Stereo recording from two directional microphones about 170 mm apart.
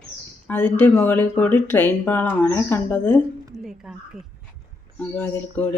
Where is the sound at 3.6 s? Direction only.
5° right (ahead or behind).